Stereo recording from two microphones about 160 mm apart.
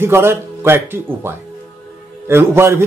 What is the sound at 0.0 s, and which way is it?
Speech, 15° right (ahead or behind).